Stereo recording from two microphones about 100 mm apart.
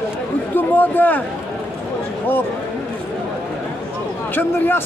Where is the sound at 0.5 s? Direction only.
20° left (ahead or behind).